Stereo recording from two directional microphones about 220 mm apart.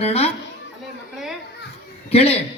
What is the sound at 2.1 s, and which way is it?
Speech, 25° left (ahead or behind).